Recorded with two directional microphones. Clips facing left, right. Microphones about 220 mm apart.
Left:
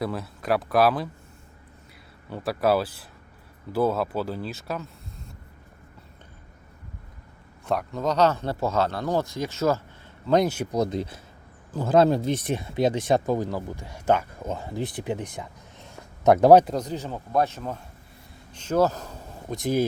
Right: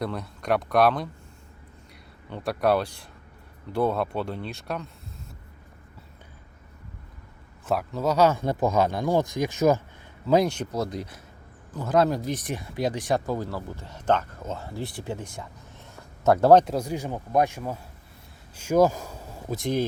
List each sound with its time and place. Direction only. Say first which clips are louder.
0.0 s speech: left 1 dB; 5° left (ahead or behind)
2.3 s speech: left 1 dB; centre (ahead or behind)
7.6 s speech: even; 5° right (ahead or behind)
10.2 s speech: even; 5° right (ahead or behind)
10.5 s speech: left 4 dB; 10° left (ahead or behind)
16.6 s speech: right 1 dB; 10° right (ahead or behind)